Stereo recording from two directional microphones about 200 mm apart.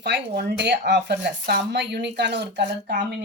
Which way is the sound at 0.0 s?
55° right (ahead or behind).